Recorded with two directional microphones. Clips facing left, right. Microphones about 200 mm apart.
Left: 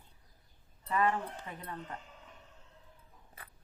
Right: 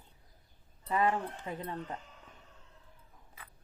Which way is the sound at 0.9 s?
25° right (ahead or behind).